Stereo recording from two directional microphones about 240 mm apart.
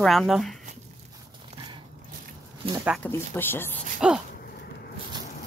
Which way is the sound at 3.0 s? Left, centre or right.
Centre.